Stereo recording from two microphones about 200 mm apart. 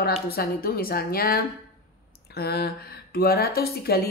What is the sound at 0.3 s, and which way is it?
Speech, 50° left (ahead or behind).